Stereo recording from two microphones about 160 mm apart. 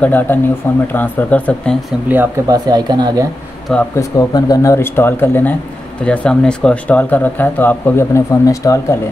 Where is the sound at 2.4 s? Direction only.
25° right (ahead or behind).